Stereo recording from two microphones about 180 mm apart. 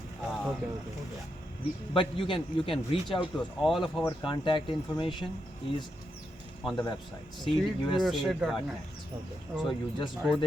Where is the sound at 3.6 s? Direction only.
Centre (ahead or behind).